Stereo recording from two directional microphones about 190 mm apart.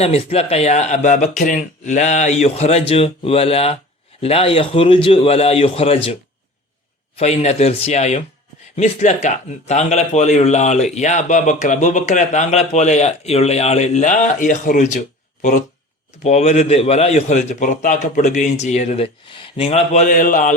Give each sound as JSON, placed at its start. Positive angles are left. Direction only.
{"t": 0.0, "sound": "a man's voice", "side_deg": 30}
{"t": 7.2, "sound": "a man's voice", "side_deg": 35}